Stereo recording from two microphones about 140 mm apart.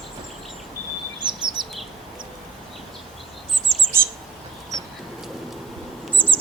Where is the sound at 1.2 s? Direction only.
30° right (ahead or behind).